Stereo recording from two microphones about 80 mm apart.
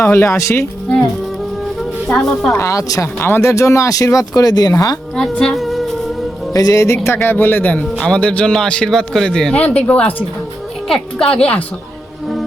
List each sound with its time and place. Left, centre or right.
0.0 s speech: left
1.8 s speech: centre
2.6 s speech: left
5.3 s music: centre
6.5 s speech: left; by 9.6 s centre
9.6 s speech: centre
10.8 s speech: centre